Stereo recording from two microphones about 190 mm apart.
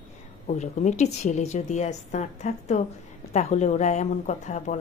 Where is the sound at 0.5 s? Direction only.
40° left (ahead or behind).